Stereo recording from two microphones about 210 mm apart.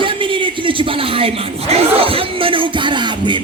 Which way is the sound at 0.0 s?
25° right (ahead or behind).